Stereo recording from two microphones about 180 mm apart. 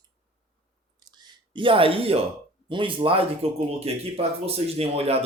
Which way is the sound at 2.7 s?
30° right (ahead or behind).